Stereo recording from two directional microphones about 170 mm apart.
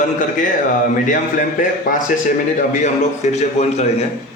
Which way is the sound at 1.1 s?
50° left (ahead or behind).